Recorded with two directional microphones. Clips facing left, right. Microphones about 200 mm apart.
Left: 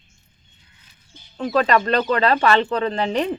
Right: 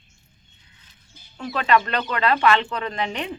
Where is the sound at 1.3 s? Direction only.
35° left (ahead or behind).